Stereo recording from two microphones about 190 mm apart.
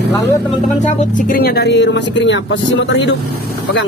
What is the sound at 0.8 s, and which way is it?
Speech, 50° left (ahead or behind).